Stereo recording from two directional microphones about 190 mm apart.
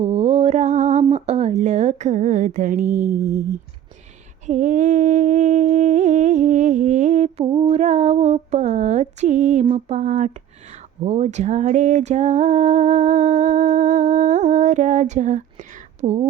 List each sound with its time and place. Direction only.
0.0 s mantra: 30° right (ahead or behind)
1.1 s speech: 35° right (ahead or behind)
4.4 s humming: 40° right (ahead or behind)